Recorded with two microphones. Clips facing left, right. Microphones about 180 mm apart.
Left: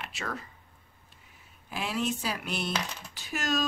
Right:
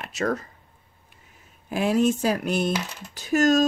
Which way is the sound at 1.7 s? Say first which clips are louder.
Right 10 dB; 45° right (ahead or behind).